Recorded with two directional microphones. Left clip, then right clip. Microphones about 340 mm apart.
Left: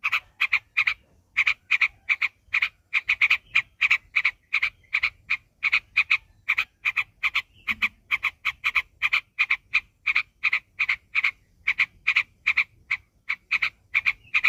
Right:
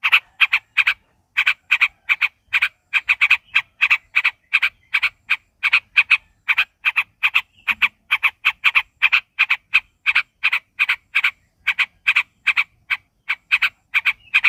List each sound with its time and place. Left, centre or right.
0.0 s frog: right